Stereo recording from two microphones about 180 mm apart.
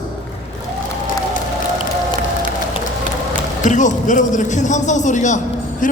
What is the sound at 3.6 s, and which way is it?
A man's voice, 45° left (ahead or behind).